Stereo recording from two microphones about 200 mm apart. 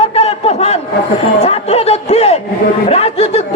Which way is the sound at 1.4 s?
30° left (ahead or behind).